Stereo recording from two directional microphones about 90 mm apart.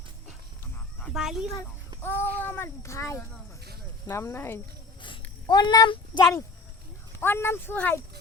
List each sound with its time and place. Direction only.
1.1 s speech: 5° right (ahead or behind)
2.0 s a child's voice: 25° left (ahead or behind)
5.5 s a child's voice: 55° left (ahead or behind)
7.2 s a child's voice: 25° left (ahead or behind)